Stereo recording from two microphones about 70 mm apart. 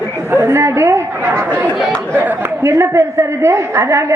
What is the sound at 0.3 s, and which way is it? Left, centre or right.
Speech, right.